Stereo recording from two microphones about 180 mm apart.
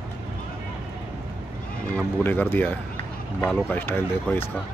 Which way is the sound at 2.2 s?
10° left (ahead or behind).